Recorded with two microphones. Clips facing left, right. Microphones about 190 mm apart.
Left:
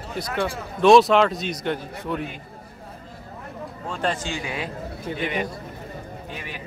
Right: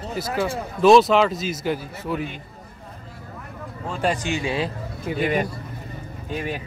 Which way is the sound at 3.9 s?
10° right (ahead or behind).